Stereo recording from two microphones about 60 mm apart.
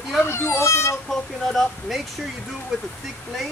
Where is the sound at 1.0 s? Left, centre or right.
Centre.